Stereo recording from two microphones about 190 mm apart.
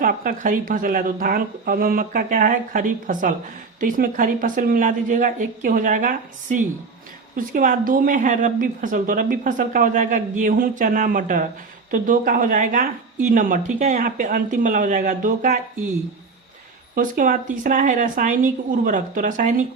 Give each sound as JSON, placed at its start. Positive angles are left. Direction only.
{"t": 0.0, "sound": "a woman's voice", "side_deg": -45}
{"t": 16.9, "sound": "a woman's voice", "side_deg": -45}